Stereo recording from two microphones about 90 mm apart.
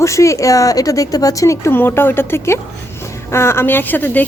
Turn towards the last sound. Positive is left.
turn(degrees=20)  # may be behind; listen again after turning